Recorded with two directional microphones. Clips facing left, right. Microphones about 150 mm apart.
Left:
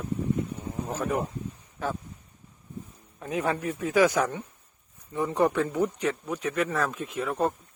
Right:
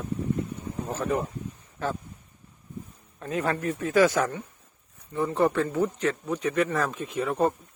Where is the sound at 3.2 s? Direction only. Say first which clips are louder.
Even; 10° left (ahead or behind).